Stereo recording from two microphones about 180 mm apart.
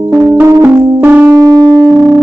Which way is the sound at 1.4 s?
20° right (ahead or behind).